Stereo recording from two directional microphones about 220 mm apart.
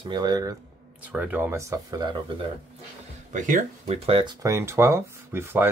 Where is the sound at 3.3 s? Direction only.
35° right (ahead or behind).